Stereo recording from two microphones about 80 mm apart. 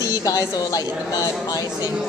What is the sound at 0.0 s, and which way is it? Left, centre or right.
Speech, left.